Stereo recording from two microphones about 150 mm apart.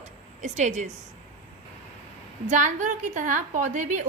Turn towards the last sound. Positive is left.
turn(degrees=-55)  # may be behind; listen again after turning